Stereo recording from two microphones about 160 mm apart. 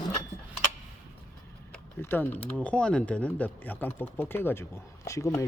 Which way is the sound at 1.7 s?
15° left (ahead or behind).